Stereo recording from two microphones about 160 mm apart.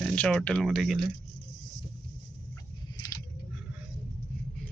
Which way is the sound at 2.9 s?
20° left (ahead or behind).